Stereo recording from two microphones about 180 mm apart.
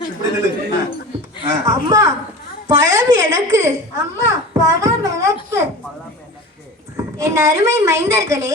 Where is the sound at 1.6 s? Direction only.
15° right (ahead or behind).